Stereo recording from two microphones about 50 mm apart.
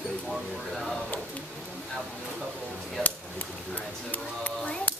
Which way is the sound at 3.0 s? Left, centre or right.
Left.